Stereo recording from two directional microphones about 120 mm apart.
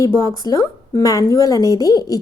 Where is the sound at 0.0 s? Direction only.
30° left (ahead or behind).